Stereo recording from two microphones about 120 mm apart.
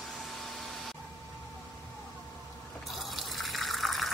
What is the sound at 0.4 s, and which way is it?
Vacuum cleaner, centre (ahead or behind).